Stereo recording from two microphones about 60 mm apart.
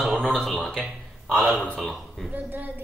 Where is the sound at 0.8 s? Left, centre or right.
Centre.